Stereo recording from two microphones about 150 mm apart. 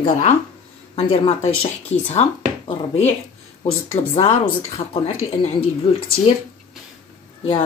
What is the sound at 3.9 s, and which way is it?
Speech, 40° left (ahead or behind).